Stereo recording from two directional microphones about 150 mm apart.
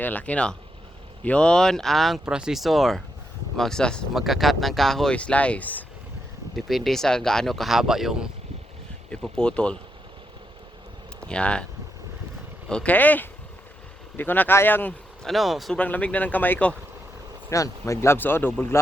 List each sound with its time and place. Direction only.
0.0 s speech: 10° left (ahead or behind)
11.3 s speech: 5° left (ahead or behind)
12.6 s speech: 5° left (ahead or behind)
15.3 s speech: centre (ahead or behind)
17.5 s speech: 20° left (ahead or behind)